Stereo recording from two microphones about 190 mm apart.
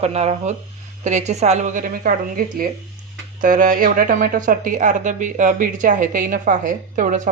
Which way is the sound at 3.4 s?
45° right (ahead or behind).